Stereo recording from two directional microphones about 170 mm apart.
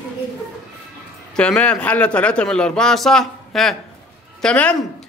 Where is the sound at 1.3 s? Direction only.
5° left (ahead or behind).